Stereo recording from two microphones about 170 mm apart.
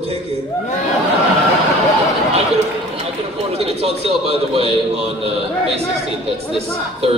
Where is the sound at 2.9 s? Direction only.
35° right (ahead or behind).